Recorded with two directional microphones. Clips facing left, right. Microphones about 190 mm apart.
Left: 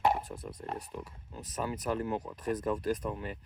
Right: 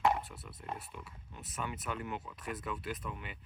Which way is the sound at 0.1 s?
45° left (ahead or behind).